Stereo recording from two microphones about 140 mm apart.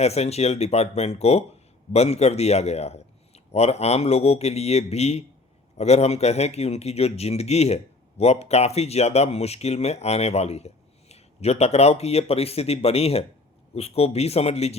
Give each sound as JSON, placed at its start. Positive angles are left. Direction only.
{"t": 0.0, "sound": "a man's voice", "side_deg": 50}